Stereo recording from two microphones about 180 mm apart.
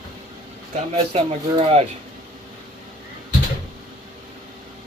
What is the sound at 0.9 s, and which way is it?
Speech, 35° right (ahead or behind).